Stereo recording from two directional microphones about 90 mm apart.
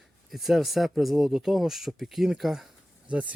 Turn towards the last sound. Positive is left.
turn(degrees=-15)  # may be behind; listen again after turning